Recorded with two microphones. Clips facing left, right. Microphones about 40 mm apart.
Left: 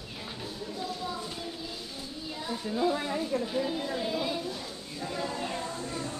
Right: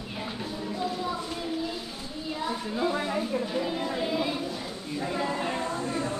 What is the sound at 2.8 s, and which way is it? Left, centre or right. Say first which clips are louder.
Chatter: even; centre.